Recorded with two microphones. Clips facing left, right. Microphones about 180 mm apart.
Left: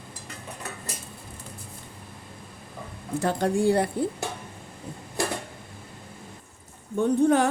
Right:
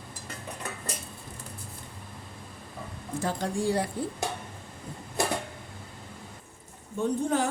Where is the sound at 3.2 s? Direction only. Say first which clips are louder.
Left 6 dB; 60° left (ahead or behind).